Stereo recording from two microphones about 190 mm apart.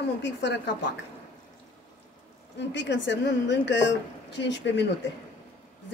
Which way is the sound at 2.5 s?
70° left (ahead or behind).